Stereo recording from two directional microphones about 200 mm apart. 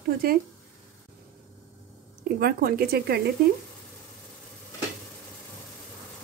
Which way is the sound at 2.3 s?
50° right (ahead or behind).